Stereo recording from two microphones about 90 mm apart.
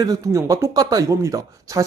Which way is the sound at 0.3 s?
35° right (ahead or behind).